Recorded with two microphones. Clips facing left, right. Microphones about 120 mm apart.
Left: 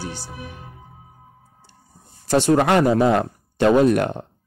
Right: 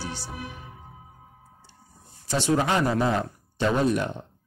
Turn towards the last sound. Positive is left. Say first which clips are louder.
# left 8 dB
turn(degrees=65)  # may be behind; listen again after turning